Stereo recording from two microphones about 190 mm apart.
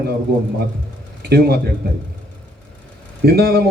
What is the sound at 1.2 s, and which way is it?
Speech, 60° right (ahead or behind).